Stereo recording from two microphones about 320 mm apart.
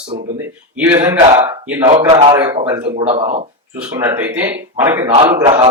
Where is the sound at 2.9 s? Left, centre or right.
Centre.